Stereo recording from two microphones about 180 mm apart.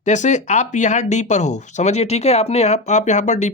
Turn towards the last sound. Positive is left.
turn(degrees=40)  # may be behind; listen again after turning